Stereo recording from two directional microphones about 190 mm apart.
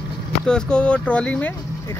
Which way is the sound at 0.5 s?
5° left (ahead or behind).